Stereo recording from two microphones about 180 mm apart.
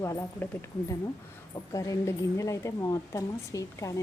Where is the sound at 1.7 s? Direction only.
20° left (ahead or behind).